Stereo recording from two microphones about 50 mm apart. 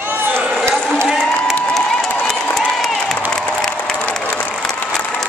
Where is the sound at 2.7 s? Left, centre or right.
Centre.